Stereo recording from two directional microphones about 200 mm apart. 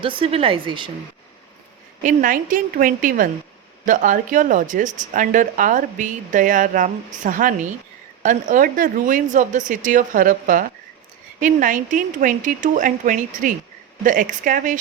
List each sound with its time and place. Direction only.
0.0 s speech: 25° right (ahead or behind)
2.0 s a woman's voice: 45° right (ahead or behind)